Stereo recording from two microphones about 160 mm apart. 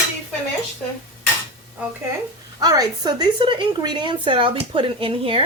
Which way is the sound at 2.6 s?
25° right (ahead or behind).